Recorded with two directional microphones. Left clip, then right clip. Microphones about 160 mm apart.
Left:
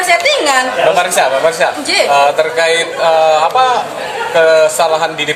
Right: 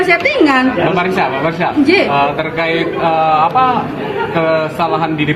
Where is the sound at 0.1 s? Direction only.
30° left (ahead or behind).